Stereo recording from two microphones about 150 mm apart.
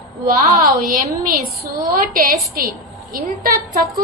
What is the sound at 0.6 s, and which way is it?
Speech, 65° right (ahead or behind).